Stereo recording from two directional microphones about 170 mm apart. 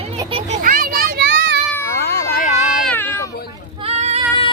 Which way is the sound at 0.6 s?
60° right (ahead or behind).